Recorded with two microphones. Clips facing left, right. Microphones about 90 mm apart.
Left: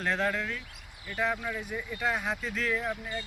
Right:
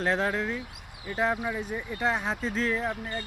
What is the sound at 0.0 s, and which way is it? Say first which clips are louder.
Speech: right 3 dB; 35° right (ahead or behind).